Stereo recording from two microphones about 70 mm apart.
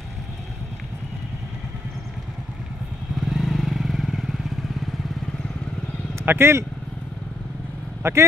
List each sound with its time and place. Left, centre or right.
3.2 s vehicle: centre
6.2 s speech: right
8.0 s speech: right